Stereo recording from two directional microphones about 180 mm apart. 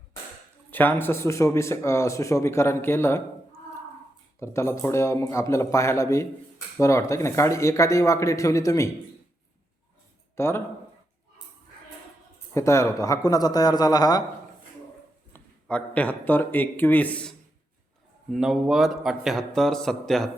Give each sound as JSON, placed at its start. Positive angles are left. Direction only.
{"t": 0.7, "sound": "speech", "side_deg": 10}
{"t": 4.4, "sound": "speech", "side_deg": 15}
{"t": 10.3, "sound": "speech", "side_deg": 15}
{"t": 12.5, "sound": "a man's voice", "side_deg": 15}
{"t": 15.3, "sound": "a man's voice", "side_deg": 5}